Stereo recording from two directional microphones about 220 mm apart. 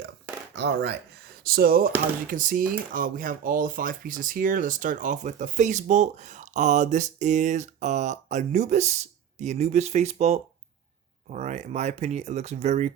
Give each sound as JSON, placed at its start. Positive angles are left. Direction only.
{"t": 0.5, "sound": "speech", "side_deg": -55}